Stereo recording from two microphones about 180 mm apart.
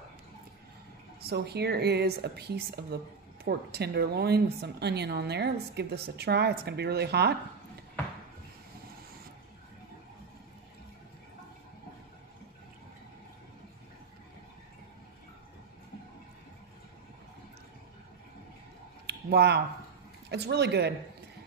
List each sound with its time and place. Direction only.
1.2 s a woman's voice: 65° right (ahead or behind)
19.0 s a sound: 65° right (ahead or behind)
20.2 s speech: 65° right (ahead or behind)